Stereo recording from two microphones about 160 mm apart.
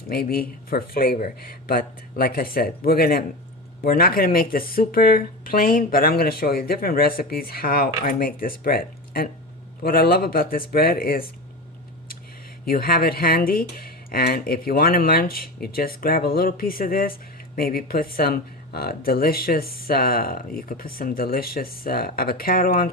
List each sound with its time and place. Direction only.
0.1 s speech: 70° left (ahead or behind)
12.6 s speech: 65° left (ahead or behind)